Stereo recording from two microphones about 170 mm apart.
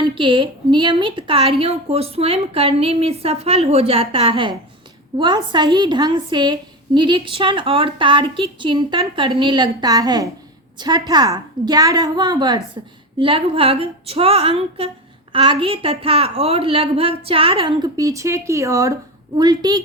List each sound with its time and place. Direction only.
0.0 s a woman's voice: 30° right (ahead or behind)